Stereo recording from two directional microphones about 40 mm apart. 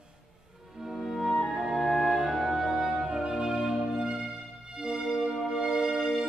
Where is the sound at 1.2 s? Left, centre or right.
Centre.